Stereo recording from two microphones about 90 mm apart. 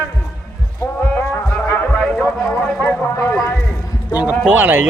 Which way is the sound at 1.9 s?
10° left (ahead or behind).